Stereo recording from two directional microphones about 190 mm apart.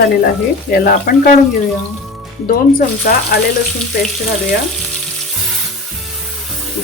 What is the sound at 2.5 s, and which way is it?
Speech, 50° left (ahead or behind).